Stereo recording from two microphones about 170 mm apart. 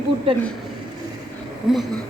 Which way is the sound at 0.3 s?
30° right (ahead or behind).